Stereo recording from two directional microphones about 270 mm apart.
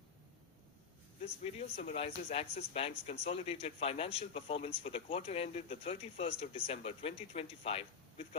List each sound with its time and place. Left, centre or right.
1.2 s speech: left